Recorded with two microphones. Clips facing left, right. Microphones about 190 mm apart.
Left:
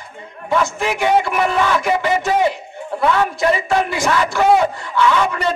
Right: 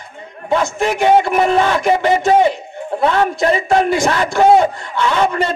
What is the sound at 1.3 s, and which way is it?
Speech, 25° right (ahead or behind).